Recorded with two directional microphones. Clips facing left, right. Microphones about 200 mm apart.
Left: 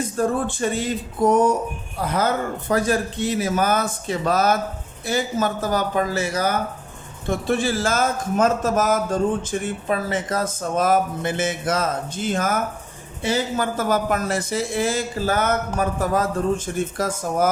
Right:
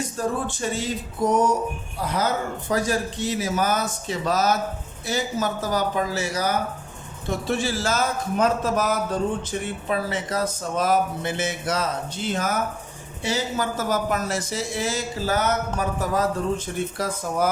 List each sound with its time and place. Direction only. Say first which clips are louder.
0.2 s a man's voice: left 5 dB; 55° left (ahead or behind)